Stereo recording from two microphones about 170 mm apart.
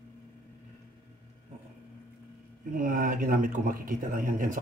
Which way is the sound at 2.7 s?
55° right (ahead or behind).